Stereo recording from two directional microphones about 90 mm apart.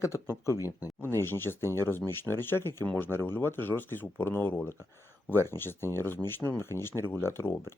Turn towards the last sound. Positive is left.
turn(degrees=25)  # may be behind; listen again after turning